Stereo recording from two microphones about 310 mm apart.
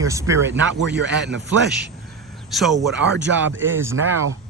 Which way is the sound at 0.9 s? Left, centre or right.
Right.